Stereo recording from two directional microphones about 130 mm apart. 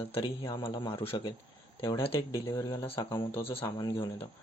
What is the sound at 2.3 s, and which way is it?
Speech, 25° left (ahead or behind).